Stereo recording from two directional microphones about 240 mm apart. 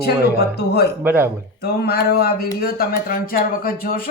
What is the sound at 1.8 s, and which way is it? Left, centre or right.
Speech, left.